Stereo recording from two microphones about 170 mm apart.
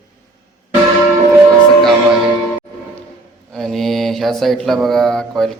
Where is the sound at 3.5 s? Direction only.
5° left (ahead or behind).